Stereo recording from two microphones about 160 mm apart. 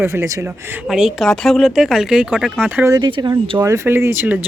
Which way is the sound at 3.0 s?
30° right (ahead or behind).